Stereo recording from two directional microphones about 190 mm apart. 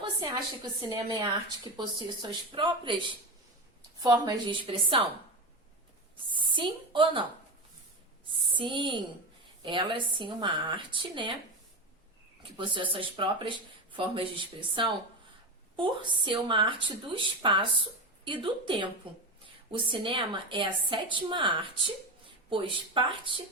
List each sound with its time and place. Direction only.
0.2 s a woman's voice: 20° right (ahead or behind)
4.1 s a woman's voice: 20° right (ahead or behind)
6.3 s a woman's voice: 25° right (ahead or behind)
8.3 s a woman's voice: 25° right (ahead or behind)
12.4 s a woman's voice: 25° right (ahead or behind)